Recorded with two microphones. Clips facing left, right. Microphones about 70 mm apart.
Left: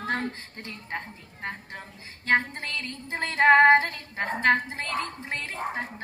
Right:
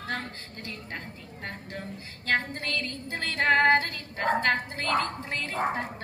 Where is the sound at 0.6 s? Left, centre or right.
Left.